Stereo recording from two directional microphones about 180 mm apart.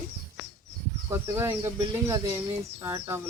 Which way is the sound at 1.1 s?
15° right (ahead or behind).